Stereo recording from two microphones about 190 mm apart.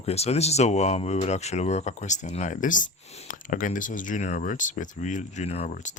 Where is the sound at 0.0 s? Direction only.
35° left (ahead or behind).